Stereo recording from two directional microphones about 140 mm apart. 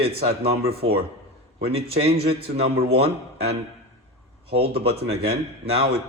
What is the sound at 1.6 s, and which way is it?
Speech, 45° right (ahead or behind).